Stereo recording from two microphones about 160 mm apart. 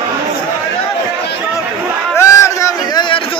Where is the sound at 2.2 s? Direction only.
20° left (ahead or behind).